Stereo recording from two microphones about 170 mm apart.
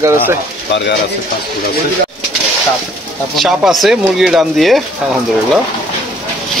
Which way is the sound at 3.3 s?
Centre (ahead or behind).